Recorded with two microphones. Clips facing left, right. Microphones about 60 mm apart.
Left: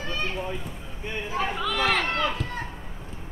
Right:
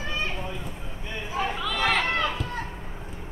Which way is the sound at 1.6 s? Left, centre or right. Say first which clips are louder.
Even; centre.